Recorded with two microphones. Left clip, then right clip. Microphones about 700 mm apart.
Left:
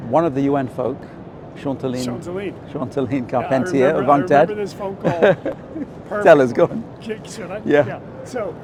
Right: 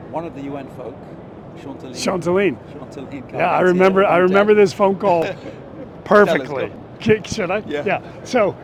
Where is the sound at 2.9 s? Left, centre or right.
Left.